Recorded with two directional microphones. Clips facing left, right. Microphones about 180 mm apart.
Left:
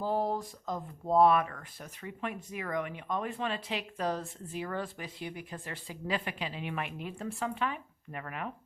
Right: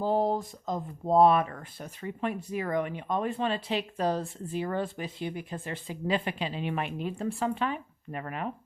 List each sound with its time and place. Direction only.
0.0 s speech: 25° right (ahead or behind)